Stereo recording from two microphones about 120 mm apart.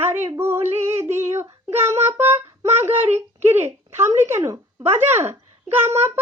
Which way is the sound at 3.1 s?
20° right (ahead or behind).